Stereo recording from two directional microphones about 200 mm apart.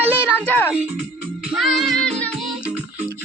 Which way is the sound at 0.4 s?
10° left (ahead or behind).